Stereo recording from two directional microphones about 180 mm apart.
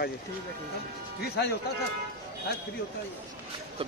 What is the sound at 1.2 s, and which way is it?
Speech, 65° left (ahead or behind).